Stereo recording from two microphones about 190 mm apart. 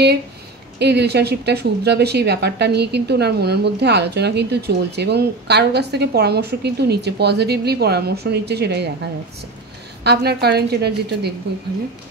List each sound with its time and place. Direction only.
0.7 s speech: 60° right (ahead or behind)
10.0 s speech: 60° right (ahead or behind)